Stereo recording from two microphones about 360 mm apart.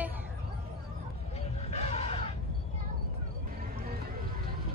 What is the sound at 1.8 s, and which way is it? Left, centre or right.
Music, centre.